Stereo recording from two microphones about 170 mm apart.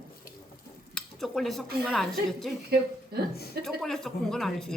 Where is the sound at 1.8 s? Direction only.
Centre (ahead or behind).